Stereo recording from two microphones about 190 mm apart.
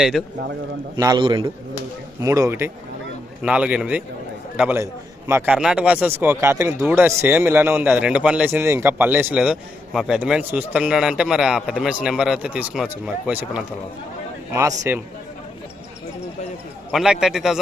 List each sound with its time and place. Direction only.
0.0 s a man's voice: centre (ahead or behind)
0.9 s a man's voice: 20° right (ahead or behind)
16.9 s a man's voice: centre (ahead or behind)